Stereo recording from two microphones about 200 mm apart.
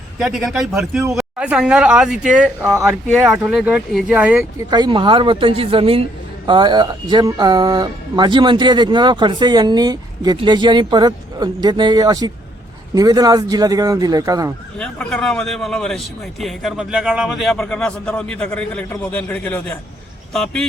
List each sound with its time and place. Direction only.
0.2 s speech: centre (ahead or behind)
4.7 s speech: 25° right (ahead or behind)
14.8 s speech: 5° left (ahead or behind)